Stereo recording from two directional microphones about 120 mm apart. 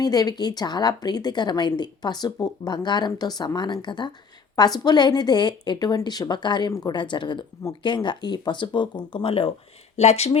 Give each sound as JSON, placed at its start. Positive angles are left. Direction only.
{"t": 0.0, "sound": "speech", "side_deg": 30}
{"t": 10.0, "sound": "speech", "side_deg": 65}